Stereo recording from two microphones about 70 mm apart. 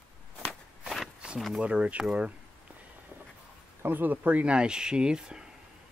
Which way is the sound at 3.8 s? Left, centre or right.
Right.